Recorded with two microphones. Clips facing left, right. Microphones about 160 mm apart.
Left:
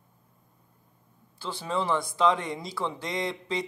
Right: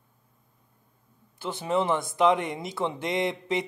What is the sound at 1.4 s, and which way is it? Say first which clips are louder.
Speech: right 4 dB; 20° right (ahead or behind).